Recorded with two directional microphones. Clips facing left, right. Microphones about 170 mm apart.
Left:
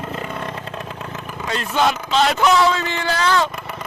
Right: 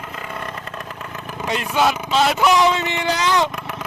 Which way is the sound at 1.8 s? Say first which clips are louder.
Even; 5° right (ahead or behind).